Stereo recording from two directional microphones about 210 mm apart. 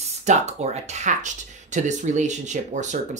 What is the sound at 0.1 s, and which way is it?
Speech, 35° right (ahead or behind).